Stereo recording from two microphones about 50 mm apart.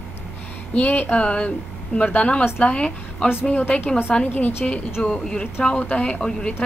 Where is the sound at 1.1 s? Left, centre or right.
Left.